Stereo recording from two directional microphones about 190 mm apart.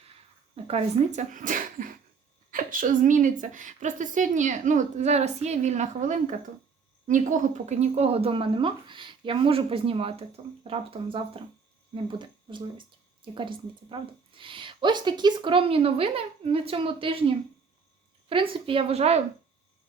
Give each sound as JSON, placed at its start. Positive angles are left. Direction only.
{"t": 0.5, "sound": "a woman's voice", "side_deg": -35}